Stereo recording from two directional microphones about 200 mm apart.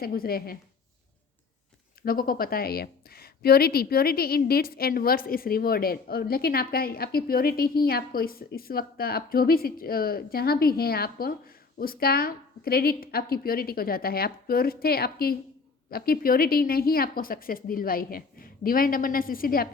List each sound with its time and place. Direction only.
0.0 s a woman's voice: 50° left (ahead or behind)
2.0 s a woman's voice: 45° left (ahead or behind)